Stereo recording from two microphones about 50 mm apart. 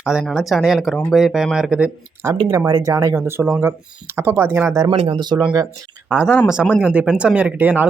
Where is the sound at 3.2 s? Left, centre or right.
Right.